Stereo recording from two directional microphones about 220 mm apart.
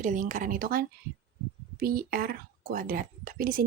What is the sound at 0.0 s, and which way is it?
A woman's voice, 35° right (ahead or behind).